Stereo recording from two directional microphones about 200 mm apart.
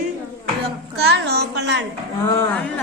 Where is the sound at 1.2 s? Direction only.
55° right (ahead or behind).